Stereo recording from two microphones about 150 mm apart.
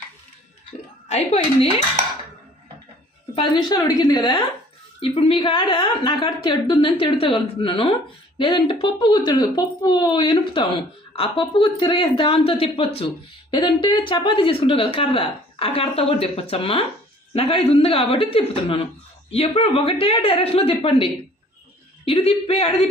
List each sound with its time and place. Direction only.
1.0 s speech: 45° left (ahead or behind)
3.3 s a woman's voice: 30° left (ahead or behind)